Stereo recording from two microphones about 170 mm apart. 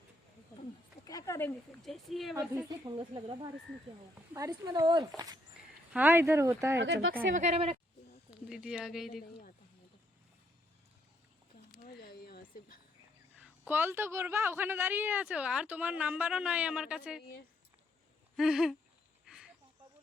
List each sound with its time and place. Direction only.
1.0 s a sound: 20° left (ahead or behind)
1.8 s speech: centre (ahead or behind)
2.6 s speech: 25° right (ahead or behind)
5.9 s a woman's voice: 10° right (ahead or behind)
6.7 s speech: 75° right (ahead or behind); by 7.4 s 60° right (ahead or behind)
7.4 s a woman's voice: 35° right (ahead or behind)
8.3 s speech: 5° right (ahead or behind)
11.9 s a sound: 65° left (ahead or behind)
13.7 s a woman's voice: 10° right (ahead or behind)
18.3 s speech: 5° right (ahead or behind)
19.2 s a sound: 5° right (ahead or behind)